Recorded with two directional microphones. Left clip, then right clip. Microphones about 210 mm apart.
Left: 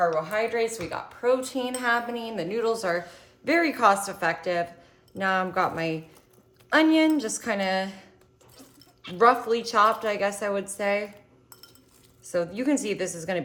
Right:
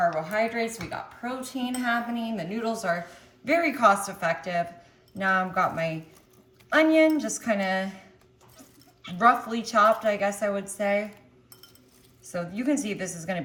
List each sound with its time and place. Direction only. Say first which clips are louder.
0.2 s a woman's voice: left 1 dB; 30° left (ahead or behind)
9.0 s a woman's voice: left 1 dB; 35° left (ahead or behind)
12.2 s a woman's voice: left 4 dB; 40° left (ahead or behind)